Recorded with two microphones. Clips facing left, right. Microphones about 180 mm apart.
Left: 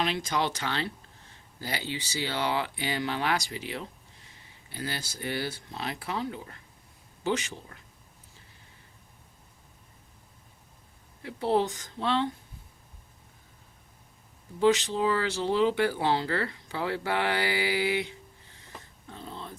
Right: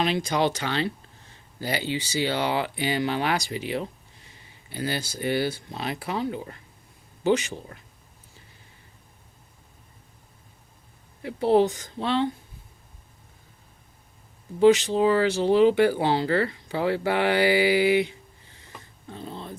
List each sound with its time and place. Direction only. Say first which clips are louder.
0.0 s speech: right 5 dB; 15° right (ahead or behind)
11.2 s a woman's voice: right 6 dB; 15° right (ahead or behind)
14.9 s speech: right 6 dB; 15° right (ahead or behind)